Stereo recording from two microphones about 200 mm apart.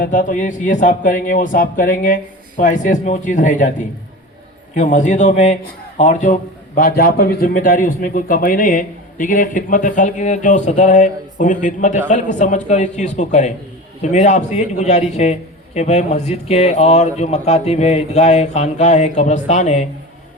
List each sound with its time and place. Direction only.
0.0 s a man's voice: 40° left (ahead or behind)
4.7 s a man's voice: 40° left (ahead or behind)